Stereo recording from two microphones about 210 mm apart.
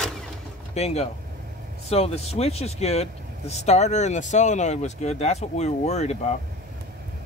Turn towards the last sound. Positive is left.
turn(degrees=30)  # may be behind; listen again after turning